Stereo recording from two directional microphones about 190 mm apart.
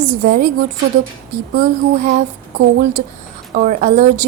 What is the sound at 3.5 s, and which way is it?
Speech, 40° right (ahead or behind).